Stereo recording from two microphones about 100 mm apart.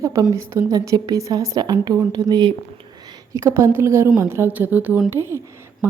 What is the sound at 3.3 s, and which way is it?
Speech, 30° right (ahead or behind).